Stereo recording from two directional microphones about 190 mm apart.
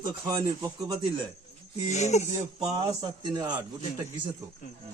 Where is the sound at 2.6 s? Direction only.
25° right (ahead or behind).